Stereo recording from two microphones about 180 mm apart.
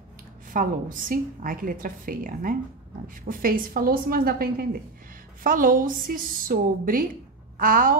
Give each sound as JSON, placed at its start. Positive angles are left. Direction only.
{"t": 0.5, "sound": "a woman's voice", "side_deg": -50}